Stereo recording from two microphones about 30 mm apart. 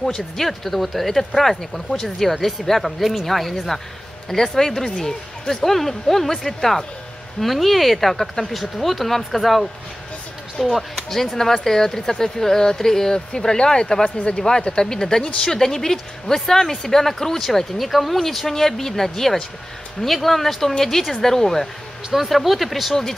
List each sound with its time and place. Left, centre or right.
0.0 s speech: centre
0.5 s speech: centre
17.5 s speech: centre
22.1 s speech: centre